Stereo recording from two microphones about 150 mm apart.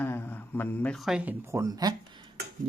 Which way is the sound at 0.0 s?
15° left (ahead or behind).